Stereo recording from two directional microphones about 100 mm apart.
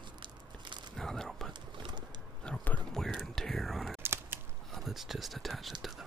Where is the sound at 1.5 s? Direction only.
50° right (ahead or behind).